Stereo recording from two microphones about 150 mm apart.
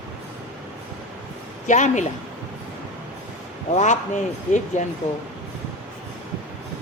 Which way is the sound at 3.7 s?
50° left (ahead or behind).